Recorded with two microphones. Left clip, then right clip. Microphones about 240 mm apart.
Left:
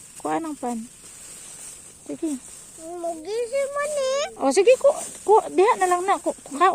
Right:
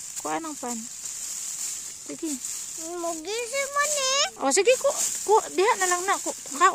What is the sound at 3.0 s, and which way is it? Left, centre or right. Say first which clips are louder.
Speech: left 3 dB; right.